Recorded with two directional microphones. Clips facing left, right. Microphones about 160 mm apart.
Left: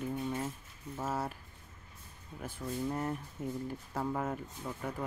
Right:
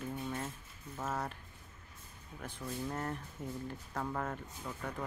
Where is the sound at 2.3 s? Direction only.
10° left (ahead or behind).